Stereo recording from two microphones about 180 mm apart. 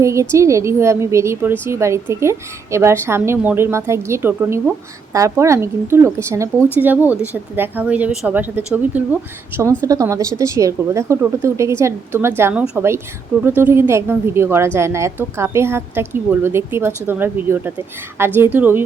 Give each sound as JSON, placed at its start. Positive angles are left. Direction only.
{"t": 0.0, "sound": "a woman's voice", "side_deg": -15}